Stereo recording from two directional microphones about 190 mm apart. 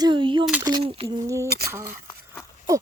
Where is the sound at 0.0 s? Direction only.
25° right (ahead or behind).